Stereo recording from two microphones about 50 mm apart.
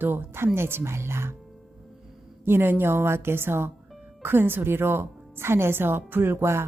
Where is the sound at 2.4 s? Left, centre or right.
Right.